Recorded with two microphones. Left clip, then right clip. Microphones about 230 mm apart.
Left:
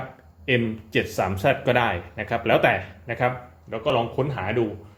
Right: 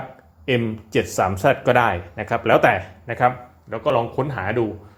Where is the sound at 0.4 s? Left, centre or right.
Right.